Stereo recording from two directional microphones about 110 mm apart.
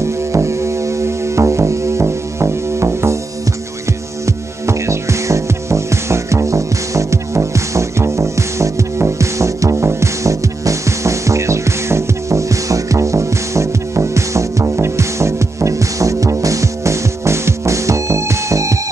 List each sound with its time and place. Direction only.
0.0 s music: 25° right (ahead or behind)
4.6 s music: 25° right (ahead or behind)